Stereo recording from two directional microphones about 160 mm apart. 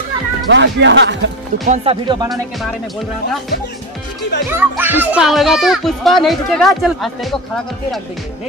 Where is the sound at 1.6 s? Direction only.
40° right (ahead or behind).